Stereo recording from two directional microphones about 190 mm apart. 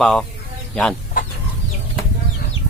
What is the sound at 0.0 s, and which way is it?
Speech, centre (ahead or behind).